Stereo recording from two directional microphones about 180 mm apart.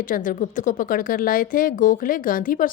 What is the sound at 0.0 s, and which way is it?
Speech, 50° left (ahead or behind).